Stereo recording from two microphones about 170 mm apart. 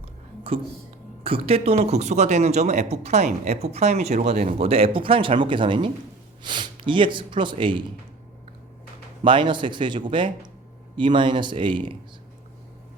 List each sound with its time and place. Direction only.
1.2 s speech: 35° right (ahead or behind)
9.2 s speech: 30° right (ahead or behind)